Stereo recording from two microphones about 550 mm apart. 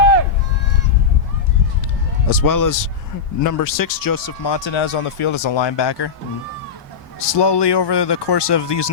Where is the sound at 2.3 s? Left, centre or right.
Left.